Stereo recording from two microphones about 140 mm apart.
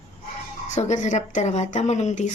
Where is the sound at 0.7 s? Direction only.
55° left (ahead or behind).